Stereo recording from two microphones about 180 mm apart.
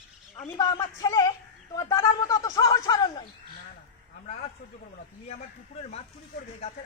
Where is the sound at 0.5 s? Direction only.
20° left (ahead or behind).